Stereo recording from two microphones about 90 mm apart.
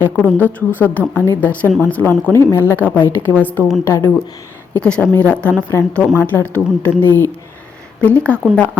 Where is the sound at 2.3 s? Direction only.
30° left (ahead or behind).